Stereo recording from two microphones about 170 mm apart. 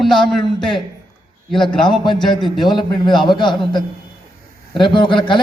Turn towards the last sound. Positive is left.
turn(degrees=30)  # may be behind; listen again after turning